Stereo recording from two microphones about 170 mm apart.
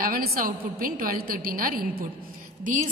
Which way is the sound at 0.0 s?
60° right (ahead or behind).